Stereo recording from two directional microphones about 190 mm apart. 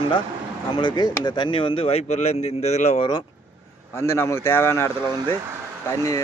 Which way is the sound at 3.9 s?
15° left (ahead or behind).